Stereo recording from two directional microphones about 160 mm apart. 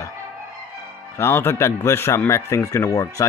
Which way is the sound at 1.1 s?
15° left (ahead or behind).